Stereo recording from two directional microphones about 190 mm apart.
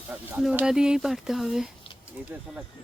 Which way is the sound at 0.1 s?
5° right (ahead or behind).